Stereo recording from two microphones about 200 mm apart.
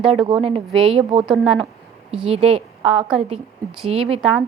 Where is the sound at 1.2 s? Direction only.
Centre (ahead or behind).